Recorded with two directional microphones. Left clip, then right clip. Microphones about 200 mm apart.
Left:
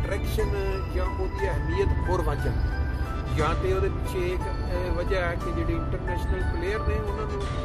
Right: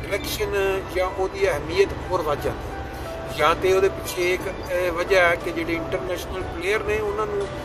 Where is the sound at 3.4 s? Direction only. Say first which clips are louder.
Right 9 dB; 10° right (ahead or behind).